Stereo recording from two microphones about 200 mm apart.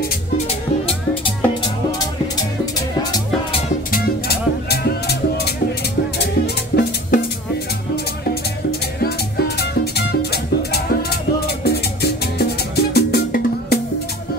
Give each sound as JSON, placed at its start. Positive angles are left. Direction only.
{"t": 3.9, "sound": "music", "side_deg": 55}
{"t": 9.0, "sound": "music", "side_deg": 50}